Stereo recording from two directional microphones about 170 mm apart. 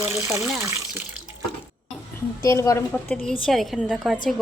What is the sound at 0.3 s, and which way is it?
Speech, 5° right (ahead or behind).